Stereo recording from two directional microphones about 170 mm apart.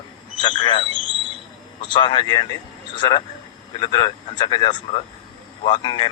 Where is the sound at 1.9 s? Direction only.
30° left (ahead or behind).